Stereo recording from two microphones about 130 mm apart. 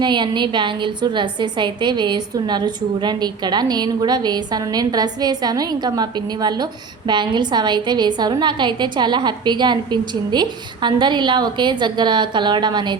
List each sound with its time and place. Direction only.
0.0 s a woman's voice: 35° right (ahead or behind)